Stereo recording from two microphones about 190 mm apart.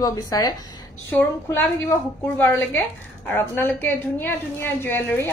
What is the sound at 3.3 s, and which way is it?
A woman's voice, 10° left (ahead or behind).